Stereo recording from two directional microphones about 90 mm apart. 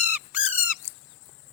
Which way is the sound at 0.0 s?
20° right (ahead or behind).